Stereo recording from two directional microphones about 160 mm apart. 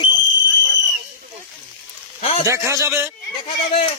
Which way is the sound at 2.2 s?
45° left (ahead or behind).